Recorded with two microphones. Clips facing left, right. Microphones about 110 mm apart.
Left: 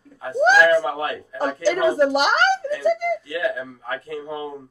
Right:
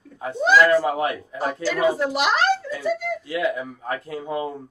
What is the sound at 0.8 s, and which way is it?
Speech, 25° right (ahead or behind).